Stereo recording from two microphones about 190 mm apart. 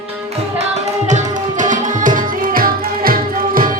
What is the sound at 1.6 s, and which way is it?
Music, 45° right (ahead or behind).